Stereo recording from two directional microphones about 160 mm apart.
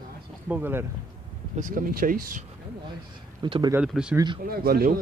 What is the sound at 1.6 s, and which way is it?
Speech, 60° right (ahead or behind).